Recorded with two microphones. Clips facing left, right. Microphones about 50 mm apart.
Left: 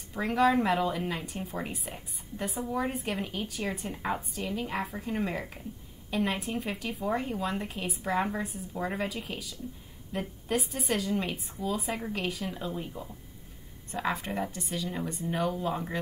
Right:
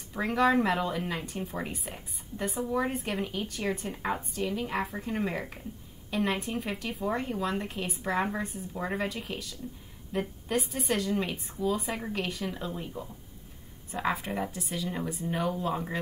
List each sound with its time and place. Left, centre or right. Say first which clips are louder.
0.1 s speech: even; centre